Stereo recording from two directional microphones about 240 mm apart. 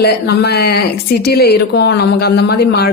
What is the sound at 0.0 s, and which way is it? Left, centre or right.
A woman's voice, left.